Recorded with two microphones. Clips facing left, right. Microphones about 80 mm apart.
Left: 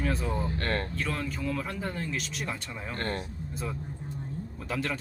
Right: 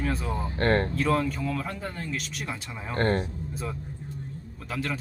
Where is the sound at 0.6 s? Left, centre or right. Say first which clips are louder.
Right 12 dB; right.